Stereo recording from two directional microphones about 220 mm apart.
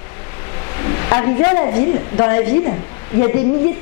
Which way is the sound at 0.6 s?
15° left (ahead or behind).